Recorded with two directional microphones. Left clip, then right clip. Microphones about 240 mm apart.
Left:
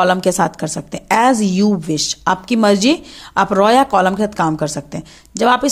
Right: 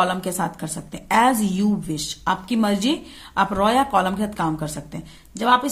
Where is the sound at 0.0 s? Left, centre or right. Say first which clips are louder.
Left 8 dB; left.